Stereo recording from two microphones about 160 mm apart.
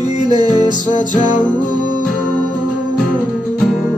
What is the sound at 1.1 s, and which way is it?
Music, 50° left (ahead or behind).